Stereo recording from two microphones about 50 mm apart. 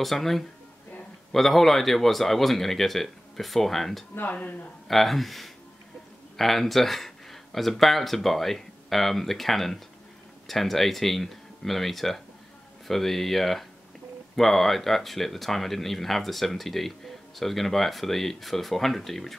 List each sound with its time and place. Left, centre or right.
0.0 s speech: centre
4.3 s speech: left
4.8 s speech: centre